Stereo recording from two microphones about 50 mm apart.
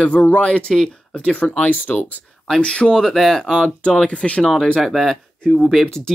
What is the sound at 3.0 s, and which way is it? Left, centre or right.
Speech, centre.